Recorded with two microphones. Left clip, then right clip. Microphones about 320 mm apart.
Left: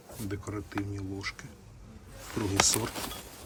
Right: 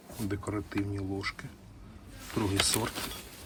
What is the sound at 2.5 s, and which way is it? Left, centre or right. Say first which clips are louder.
Speech: left 4 dB; centre.